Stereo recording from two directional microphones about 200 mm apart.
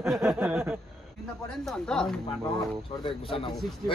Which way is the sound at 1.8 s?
5° left (ahead or behind).